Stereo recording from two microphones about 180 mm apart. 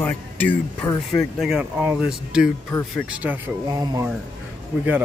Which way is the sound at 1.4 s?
5° right (ahead or behind).